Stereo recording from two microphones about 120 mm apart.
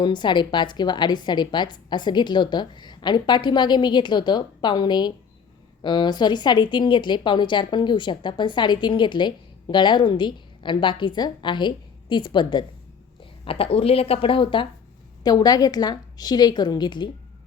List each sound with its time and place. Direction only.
0.0 s speech: 40° left (ahead or behind)
13.4 s speech: 50° left (ahead or behind)
15.2 s speech: 35° left (ahead or behind)